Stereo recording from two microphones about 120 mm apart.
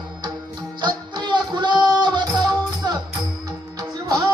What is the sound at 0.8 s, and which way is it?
Music, 40° right (ahead or behind).